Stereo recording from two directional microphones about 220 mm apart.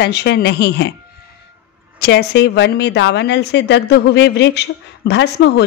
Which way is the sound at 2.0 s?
50° left (ahead or behind).